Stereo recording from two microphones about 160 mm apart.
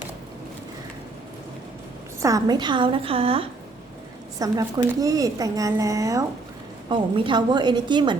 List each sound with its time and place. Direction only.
2.2 s a woman's voice: 25° right (ahead or behind)
4.4 s speech: 20° right (ahead or behind)